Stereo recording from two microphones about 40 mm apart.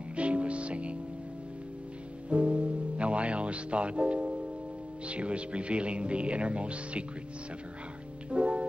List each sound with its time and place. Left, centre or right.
0.1 s music: right
2.2 s music: right
5.0 s speech: right
8.3 s music: right